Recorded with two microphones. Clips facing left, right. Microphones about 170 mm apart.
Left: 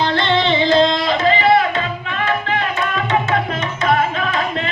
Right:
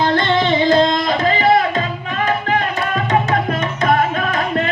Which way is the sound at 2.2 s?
40° right (ahead or behind).